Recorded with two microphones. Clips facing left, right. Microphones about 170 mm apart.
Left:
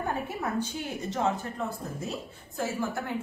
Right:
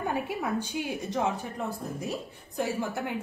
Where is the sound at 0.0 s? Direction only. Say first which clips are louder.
Right 1 dB; 10° right (ahead or behind).